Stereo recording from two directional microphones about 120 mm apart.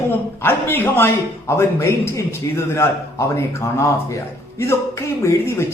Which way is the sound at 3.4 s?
25° left (ahead or behind).